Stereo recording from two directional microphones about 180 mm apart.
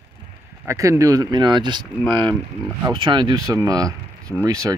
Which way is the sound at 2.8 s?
25° right (ahead or behind).